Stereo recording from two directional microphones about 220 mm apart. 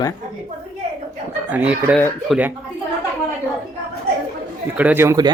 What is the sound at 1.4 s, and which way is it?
Speech, 5° right (ahead or behind).